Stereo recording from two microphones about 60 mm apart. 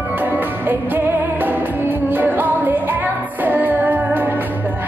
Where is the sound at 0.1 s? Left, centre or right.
Right.